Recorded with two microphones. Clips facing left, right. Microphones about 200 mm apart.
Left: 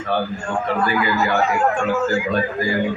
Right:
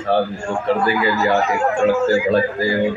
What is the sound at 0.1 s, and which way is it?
A man's voice, 30° right (ahead or behind).